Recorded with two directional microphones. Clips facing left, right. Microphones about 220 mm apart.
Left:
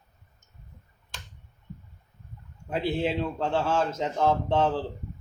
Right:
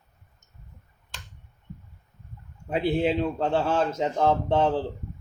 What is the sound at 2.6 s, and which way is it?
A man's voice, 15° right (ahead or behind).